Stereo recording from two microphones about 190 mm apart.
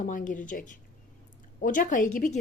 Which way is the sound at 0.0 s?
45° left (ahead or behind).